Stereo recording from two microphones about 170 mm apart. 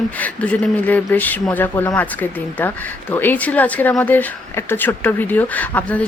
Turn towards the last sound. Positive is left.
turn(degrees=10)  # may be behind; listen again after turning